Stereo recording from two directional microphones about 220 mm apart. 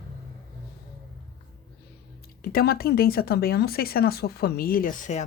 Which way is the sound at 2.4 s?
45° left (ahead or behind).